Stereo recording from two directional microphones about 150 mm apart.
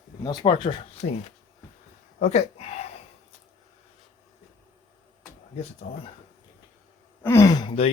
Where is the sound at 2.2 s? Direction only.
50° left (ahead or behind).